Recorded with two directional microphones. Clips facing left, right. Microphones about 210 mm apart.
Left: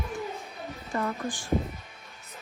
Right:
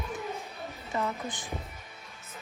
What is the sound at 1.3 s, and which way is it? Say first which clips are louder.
Speech: left 4 dB; 20° right (ahead or behind).